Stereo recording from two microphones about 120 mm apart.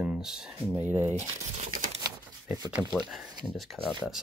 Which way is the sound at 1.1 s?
75° right (ahead or behind).